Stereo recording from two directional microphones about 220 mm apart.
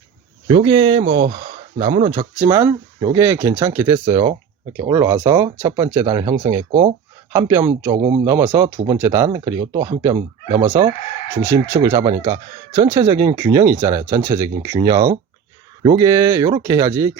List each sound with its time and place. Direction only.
0.4 s speech: 25° right (ahead or behind)